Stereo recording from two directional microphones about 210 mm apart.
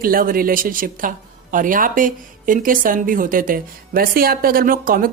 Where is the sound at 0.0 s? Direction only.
40° right (ahead or behind).